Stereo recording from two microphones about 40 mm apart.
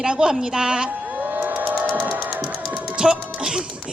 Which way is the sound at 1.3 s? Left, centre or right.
Right.